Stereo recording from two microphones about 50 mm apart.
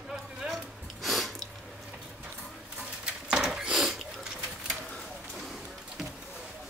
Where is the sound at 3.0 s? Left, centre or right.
Centre.